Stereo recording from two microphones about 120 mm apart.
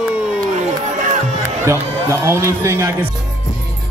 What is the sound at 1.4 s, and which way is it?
Speech, 20° right (ahead or behind).